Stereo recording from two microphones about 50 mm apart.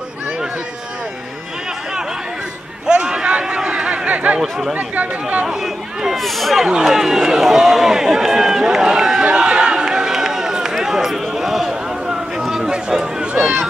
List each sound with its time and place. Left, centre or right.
2.9 s a sound: centre
4.4 s speech: centre
4.7 s speech: right
5.5 s speech: centre
6.7 s speech: centre
9.3 s run: centre
12.9 s speech: centre